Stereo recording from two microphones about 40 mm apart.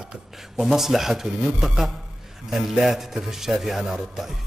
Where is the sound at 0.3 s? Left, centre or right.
Centre.